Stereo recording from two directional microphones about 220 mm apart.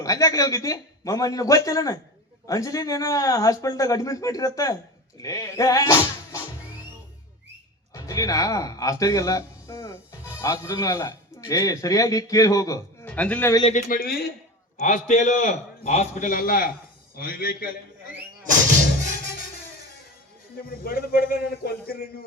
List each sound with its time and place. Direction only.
0.0 s speech: 15° left (ahead or behind)
7.9 s speech: 15° left (ahead or behind)
13.6 s a man's voice: 30° left (ahead or behind)
20.8 s speech: 40° left (ahead or behind)